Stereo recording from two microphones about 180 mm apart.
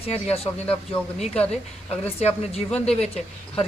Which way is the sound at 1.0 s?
10° left (ahead or behind).